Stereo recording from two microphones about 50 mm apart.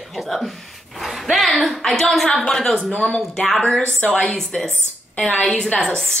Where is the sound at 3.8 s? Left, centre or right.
Left.